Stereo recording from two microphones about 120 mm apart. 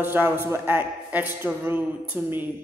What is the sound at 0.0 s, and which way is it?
A man's voice, 15° right (ahead or behind).